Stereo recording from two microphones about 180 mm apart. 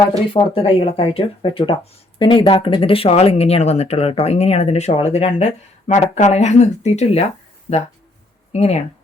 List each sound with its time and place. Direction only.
0.3 s speech: 30° left (ahead or behind)
8.5 s speech: 35° left (ahead or behind)